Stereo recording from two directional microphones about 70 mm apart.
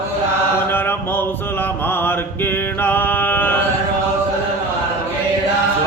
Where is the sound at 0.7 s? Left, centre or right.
Left.